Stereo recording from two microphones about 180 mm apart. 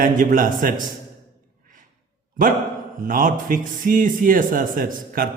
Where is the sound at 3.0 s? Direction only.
50° right (ahead or behind).